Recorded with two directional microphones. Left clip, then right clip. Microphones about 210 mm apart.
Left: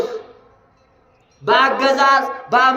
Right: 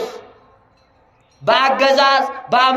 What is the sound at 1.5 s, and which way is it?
Music, 40° right (ahead or behind).